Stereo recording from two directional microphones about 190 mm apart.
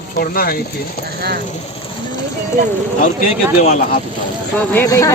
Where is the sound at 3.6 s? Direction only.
50° left (ahead or behind).